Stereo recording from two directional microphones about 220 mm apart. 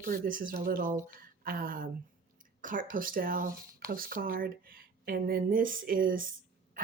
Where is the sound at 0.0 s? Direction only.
40° right (ahead or behind).